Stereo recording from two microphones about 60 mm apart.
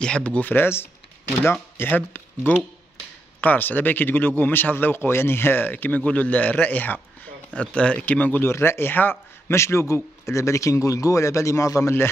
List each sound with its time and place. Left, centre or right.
0.0 s speech: centre
1.4 s speech: left
7.5 s speech: centre
8.5 s speech: left
9.5 s speech: left